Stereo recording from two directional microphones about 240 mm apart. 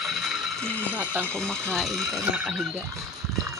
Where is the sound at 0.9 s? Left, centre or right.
Centre.